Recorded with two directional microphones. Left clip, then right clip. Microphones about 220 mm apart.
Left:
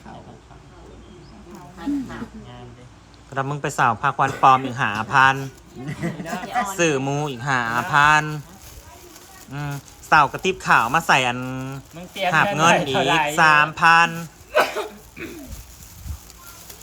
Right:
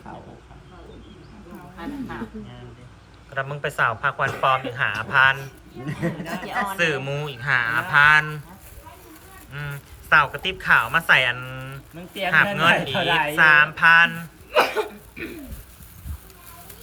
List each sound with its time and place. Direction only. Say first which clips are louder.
3.3 s speech: left 2 dB; 25° left (ahead or behind)
5.8 s speech: right 1 dB; centre (ahead or behind)
6.7 s speech: left 4 dB; 20° left (ahead or behind)
9.5 s speech: left 2 dB; 20° left (ahead or behind)
14.5 s a sound: even; 5° left (ahead or behind)